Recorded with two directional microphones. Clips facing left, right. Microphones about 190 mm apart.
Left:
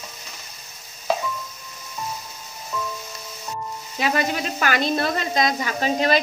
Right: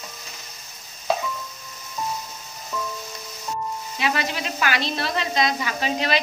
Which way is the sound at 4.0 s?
40° left (ahead or behind).